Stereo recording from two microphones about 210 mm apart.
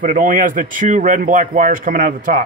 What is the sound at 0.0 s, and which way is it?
Speech, 40° right (ahead or behind).